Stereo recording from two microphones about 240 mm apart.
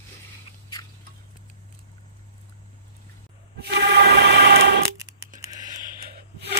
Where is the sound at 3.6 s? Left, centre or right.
Right.